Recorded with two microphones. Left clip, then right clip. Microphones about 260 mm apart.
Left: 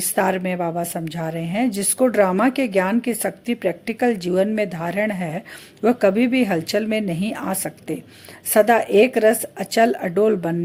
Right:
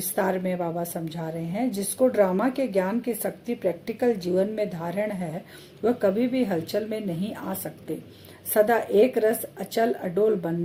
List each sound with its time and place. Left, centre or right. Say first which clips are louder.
0.2 s a woman's voice: left 5 dB; left